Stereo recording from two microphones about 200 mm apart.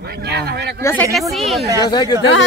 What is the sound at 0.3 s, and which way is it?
Speech, 55° right (ahead or behind).